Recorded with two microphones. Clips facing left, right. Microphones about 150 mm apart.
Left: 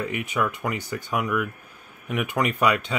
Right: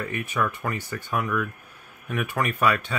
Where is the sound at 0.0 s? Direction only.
15° left (ahead or behind).